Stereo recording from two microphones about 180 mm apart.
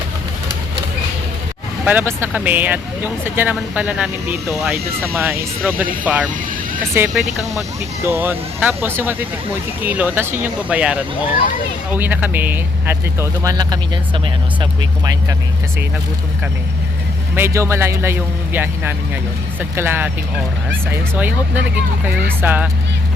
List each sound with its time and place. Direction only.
1.8 s speech: 10° right (ahead or behind)
7.1 s speech: centre (ahead or behind)
8.0 s speech: 10° right (ahead or behind)
17.3 s speech: 15° right (ahead or behind)